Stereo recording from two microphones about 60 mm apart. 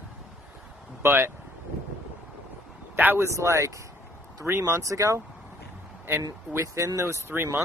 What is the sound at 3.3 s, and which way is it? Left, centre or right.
Speech, right.